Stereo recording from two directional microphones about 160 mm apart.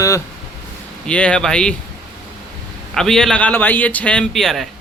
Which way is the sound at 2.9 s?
5° left (ahead or behind).